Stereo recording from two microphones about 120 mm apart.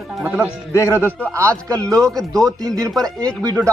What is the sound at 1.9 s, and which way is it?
Speech, 5° left (ahead or behind).